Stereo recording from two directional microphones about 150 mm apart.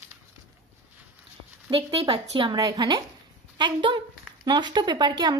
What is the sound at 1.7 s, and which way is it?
A woman's voice, 35° right (ahead or behind).